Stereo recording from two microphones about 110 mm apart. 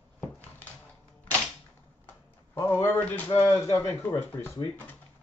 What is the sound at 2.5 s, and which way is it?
Speech, 25° left (ahead or behind).